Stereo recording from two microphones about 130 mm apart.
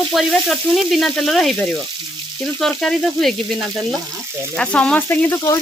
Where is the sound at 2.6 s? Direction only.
5° left (ahead or behind).